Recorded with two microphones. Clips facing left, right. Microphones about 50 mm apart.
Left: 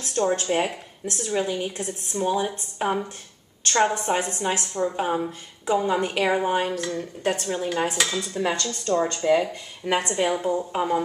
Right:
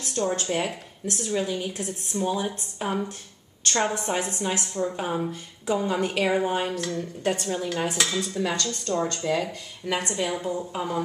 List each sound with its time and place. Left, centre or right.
0.1 s a woman's voice: centre
10.7 s a woman's voice: left